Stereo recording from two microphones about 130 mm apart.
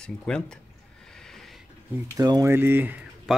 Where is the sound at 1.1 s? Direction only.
5° left (ahead or behind).